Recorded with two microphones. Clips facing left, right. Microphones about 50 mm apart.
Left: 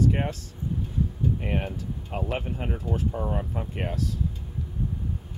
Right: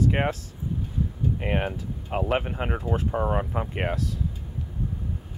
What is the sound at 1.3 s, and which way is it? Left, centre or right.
Speech, right.